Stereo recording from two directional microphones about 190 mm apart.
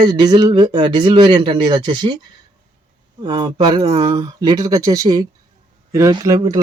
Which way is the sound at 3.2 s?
25° right (ahead or behind).